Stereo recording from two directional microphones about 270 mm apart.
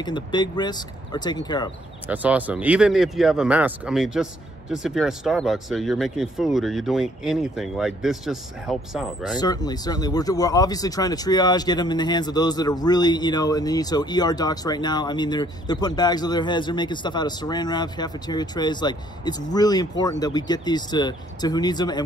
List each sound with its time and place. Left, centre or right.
0.0 s speech: centre
2.0 s speech: centre
9.4 s speech: centre